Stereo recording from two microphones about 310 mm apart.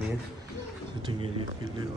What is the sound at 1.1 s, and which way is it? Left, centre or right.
Speech, centre.